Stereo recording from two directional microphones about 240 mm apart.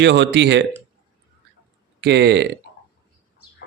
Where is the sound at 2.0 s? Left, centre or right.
Right.